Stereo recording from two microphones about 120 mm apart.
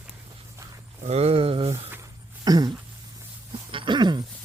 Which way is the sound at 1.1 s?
60° right (ahead or behind).